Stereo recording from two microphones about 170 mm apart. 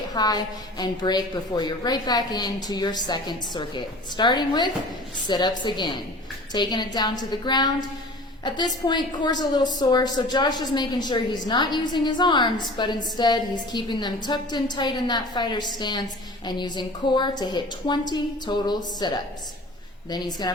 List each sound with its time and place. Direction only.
0.1 s a woman's voice: 25° left (ahead or behind)